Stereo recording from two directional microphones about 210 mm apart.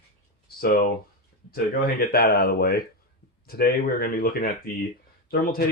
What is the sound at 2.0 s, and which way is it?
Speech, 45° left (ahead or behind).